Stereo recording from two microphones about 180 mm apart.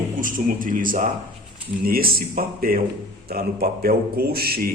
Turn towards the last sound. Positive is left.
turn(degrees=-55)  # may be behind; listen again after turning